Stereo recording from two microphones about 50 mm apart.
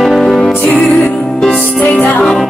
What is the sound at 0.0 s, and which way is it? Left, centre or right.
Music, centre.